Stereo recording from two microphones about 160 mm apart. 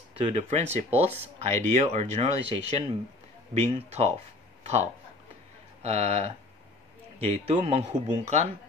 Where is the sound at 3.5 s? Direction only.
40° right (ahead or behind).